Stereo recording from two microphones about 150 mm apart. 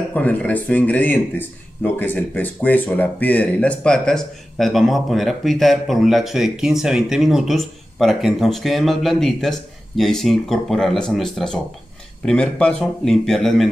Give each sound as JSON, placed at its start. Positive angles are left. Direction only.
{"t": 0.1, "sound": "a man's voice", "side_deg": 10}